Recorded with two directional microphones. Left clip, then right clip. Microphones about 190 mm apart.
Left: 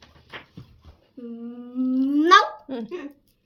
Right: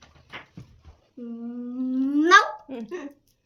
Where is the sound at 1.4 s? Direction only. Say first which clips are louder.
Left 3 dB; 20° left (ahead or behind).